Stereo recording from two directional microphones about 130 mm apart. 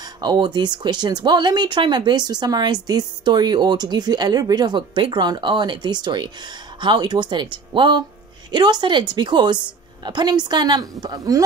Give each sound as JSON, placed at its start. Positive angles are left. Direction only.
{"t": 0.0, "sound": "speech", "side_deg": -35}